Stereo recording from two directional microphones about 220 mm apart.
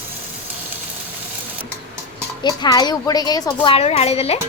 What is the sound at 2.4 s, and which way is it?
A woman's voice, 20° left (ahead or behind).